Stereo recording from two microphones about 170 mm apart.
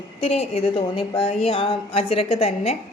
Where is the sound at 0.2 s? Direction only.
35° left (ahead or behind).